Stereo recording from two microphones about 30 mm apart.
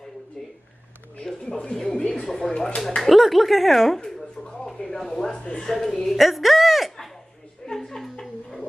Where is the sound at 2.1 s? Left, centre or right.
Centre.